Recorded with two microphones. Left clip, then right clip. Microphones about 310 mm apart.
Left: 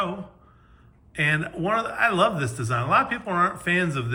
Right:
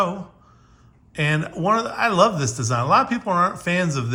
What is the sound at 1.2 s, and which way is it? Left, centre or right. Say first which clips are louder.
Speech: even; centre.